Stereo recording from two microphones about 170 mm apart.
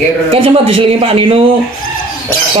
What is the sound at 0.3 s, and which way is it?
Speech, 30° right (ahead or behind).